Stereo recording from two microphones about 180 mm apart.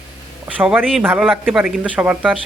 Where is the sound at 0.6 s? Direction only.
10° right (ahead or behind).